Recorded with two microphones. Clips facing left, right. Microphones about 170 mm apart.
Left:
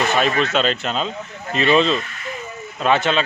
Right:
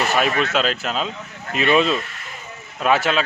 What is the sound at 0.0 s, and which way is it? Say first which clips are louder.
Speech: left 1 dB; 5° right (ahead or behind).